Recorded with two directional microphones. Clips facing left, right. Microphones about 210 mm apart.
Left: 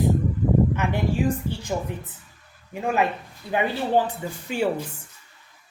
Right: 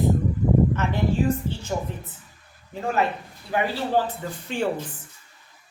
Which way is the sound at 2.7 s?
15° left (ahead or behind).